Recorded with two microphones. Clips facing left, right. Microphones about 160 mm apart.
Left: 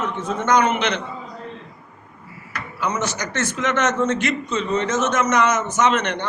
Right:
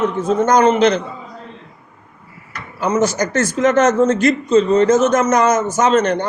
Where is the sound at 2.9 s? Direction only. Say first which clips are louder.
Right 12 dB; 40° right (ahead or behind).